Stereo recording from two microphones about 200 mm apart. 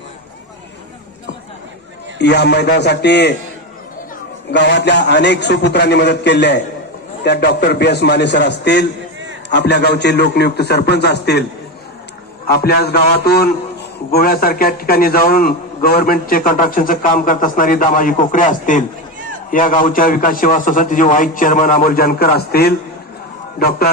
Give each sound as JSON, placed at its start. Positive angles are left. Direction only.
{"t": 2.1, "sound": "a man's voice", "side_deg": 60}
{"t": 4.5, "sound": "a man's voice", "side_deg": 60}
{"t": 12.5, "sound": "a man's voice", "side_deg": 50}